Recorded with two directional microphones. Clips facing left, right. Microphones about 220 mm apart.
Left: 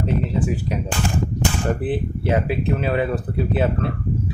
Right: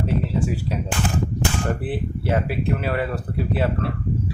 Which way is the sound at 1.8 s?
20° left (ahead or behind).